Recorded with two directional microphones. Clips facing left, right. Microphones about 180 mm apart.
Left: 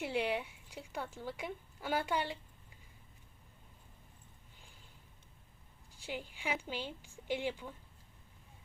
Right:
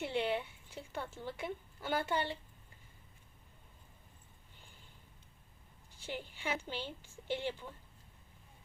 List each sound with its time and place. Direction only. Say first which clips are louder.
0.0 s a woman's voice: even; 10° left (ahead or behind)
6.1 s a woman's voice: even; 10° left (ahead or behind)